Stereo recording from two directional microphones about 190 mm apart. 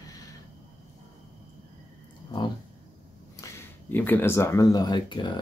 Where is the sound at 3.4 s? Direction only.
15° left (ahead or behind).